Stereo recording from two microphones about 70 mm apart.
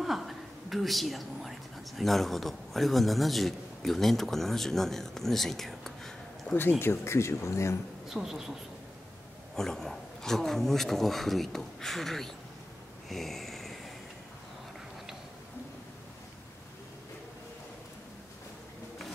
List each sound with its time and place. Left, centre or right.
0.0 s a woman's voice: centre
6.5 s speech: left
6.8 s speech: left
8.1 s speech: centre
9.6 s speech: centre
13.1 s snoring: centre